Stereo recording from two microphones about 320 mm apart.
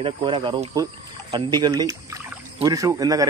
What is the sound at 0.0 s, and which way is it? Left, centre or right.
Speech, centre.